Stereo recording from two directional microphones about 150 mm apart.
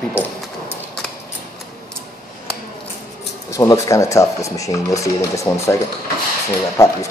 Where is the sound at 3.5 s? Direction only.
20° left (ahead or behind).